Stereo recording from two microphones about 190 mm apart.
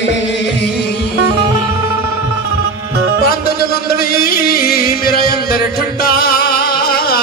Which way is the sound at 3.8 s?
55° left (ahead or behind).